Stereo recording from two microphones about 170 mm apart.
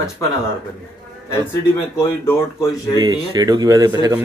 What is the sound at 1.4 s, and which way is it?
A man's voice, 15° left (ahead or behind).